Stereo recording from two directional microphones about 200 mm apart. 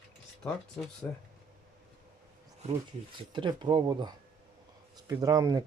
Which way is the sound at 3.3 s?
20° right (ahead or behind).